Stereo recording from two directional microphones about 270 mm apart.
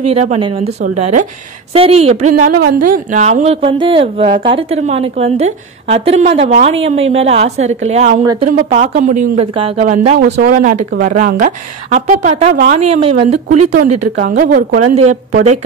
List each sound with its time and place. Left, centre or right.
0.0 s speech: right